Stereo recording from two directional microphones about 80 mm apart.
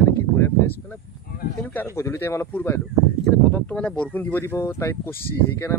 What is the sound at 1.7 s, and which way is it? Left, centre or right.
Speech, left.